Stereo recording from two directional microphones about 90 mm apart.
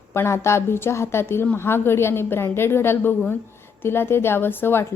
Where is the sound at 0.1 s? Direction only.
30° left (ahead or behind).